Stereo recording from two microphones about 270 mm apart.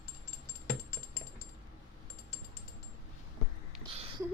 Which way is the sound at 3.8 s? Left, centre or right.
Right.